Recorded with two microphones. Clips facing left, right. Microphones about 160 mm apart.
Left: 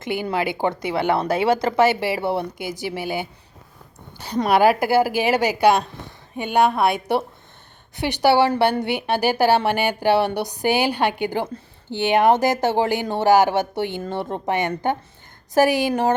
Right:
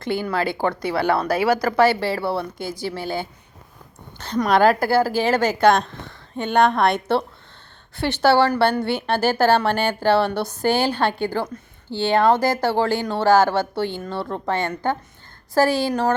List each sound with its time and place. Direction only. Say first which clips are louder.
0.0 s a woman's voice: right 1 dB; 15° left (ahead or behind)
4.4 s a woman's voice: even; 10° left (ahead or behind)